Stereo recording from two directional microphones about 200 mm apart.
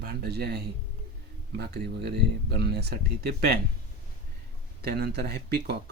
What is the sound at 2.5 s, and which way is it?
Speech, 55° right (ahead or behind).